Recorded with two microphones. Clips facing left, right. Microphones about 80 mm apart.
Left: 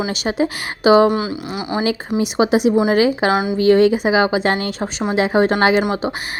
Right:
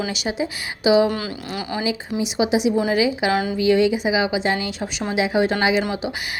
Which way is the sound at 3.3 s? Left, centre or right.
Centre.